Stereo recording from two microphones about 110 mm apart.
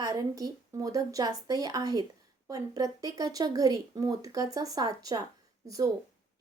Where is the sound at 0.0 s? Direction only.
35° right (ahead or behind).